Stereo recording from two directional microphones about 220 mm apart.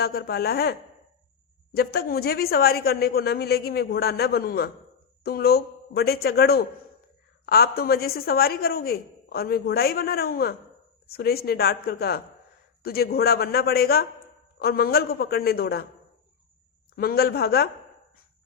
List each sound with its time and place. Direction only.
0.0 s a woman's voice: 45° left (ahead or behind)
16.9 s a woman's voice: 45° left (ahead or behind)